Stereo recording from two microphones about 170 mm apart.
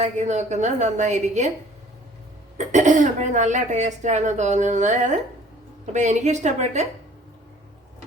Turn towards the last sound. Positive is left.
turn(degrees=-45)  # may be behind; listen again after turning